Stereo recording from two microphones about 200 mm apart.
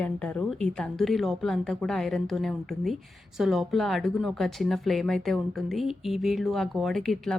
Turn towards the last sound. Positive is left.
turn(degrees=0)  # may be behind; listen again after turning